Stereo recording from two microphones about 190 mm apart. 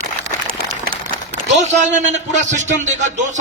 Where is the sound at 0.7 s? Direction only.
50° right (ahead or behind).